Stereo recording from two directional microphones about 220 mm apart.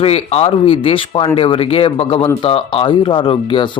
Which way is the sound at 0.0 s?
25° left (ahead or behind).